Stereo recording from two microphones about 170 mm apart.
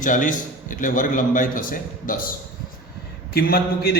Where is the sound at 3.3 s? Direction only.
65° left (ahead or behind).